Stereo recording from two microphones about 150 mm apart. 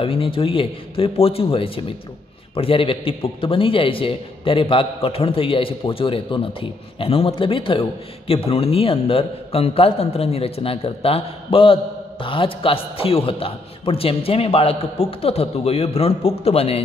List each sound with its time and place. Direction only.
0.0 s a man's voice: 35° left (ahead or behind)